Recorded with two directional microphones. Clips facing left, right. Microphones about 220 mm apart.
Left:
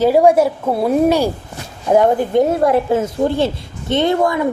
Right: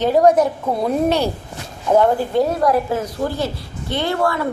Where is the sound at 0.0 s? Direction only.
10° left (ahead or behind).